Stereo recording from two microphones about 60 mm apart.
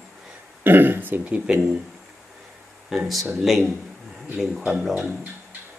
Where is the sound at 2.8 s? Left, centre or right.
Centre.